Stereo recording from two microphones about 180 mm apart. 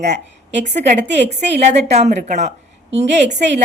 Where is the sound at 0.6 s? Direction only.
40° right (ahead or behind).